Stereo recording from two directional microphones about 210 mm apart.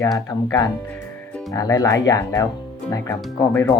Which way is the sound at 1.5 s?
15° left (ahead or behind).